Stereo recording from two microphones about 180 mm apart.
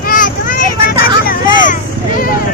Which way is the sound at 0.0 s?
50° left (ahead or behind).